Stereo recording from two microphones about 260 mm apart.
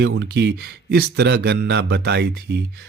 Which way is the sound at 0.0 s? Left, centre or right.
Right.